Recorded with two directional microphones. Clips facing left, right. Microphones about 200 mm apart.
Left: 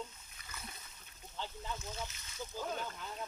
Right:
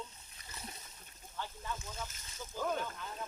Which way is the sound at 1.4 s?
15° left (ahead or behind).